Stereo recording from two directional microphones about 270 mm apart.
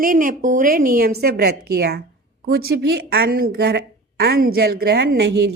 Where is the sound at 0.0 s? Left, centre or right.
Right.